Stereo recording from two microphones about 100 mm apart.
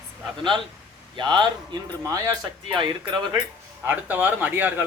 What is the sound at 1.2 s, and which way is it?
Speech, 50° right (ahead or behind).